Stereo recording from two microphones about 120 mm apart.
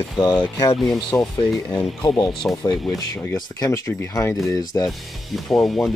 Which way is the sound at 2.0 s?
35° left (ahead or behind).